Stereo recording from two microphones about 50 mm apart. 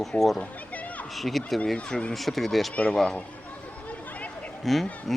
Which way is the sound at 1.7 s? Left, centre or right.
Centre.